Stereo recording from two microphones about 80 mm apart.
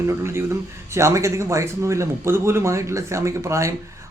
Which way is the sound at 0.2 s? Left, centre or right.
Right.